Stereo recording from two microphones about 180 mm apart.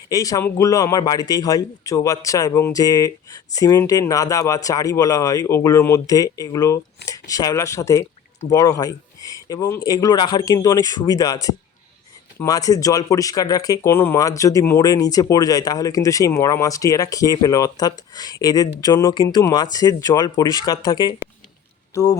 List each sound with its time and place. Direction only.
0.1 s speech: 20° left (ahead or behind)